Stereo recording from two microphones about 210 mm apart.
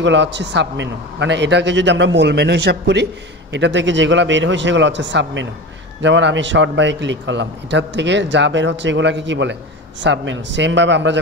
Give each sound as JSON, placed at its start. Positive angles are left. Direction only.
{"t": 0.0, "sound": "a man's voice", "side_deg": -60}